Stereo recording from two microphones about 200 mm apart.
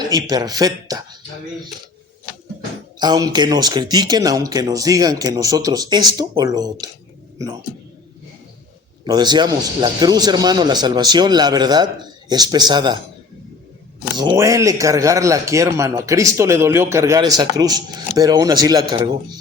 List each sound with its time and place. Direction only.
0.1 s speech: 20° right (ahead or behind)
3.0 s speech: 20° right (ahead or behind)
9.0 s speech: 20° right (ahead or behind)
14.2 s a man's voice: 20° right (ahead or behind)